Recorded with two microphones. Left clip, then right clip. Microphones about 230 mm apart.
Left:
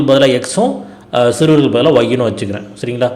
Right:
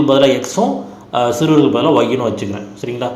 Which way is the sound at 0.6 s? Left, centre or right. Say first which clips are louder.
Left 2 dB; left.